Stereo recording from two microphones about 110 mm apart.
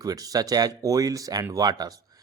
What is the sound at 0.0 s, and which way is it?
Speech, 35° right (ahead or behind).